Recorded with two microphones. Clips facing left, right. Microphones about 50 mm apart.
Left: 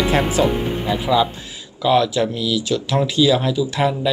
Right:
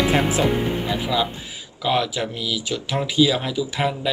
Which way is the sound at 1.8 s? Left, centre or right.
Centre.